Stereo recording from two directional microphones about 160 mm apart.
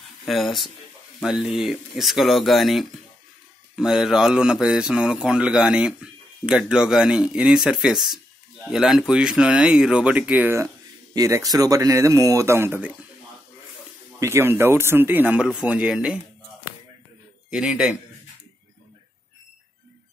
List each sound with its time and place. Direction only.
0.2 s speech: centre (ahead or behind)
14.2 s speech: 15° right (ahead or behind)
17.5 s speech: 5° right (ahead or behind)